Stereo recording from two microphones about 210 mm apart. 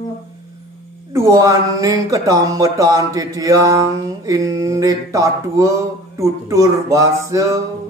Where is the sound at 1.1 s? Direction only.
15° right (ahead or behind).